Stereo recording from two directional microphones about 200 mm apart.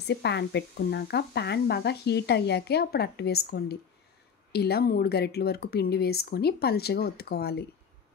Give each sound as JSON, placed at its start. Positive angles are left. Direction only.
{"t": 0.0, "sound": "speech", "side_deg": 60}